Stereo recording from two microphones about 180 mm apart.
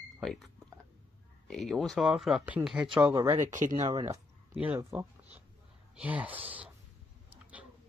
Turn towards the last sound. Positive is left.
turn(degrees=-10)  # may be behind; listen again after turning